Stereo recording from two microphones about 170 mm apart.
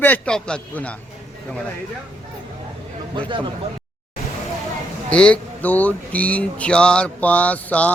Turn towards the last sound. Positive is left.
turn(degrees=10)  # may be behind; listen again after turning